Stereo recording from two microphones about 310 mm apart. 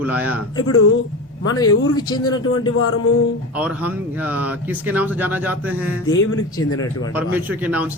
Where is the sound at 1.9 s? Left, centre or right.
Centre.